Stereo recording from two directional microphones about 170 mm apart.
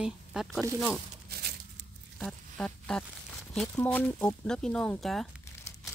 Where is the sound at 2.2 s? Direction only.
5° left (ahead or behind).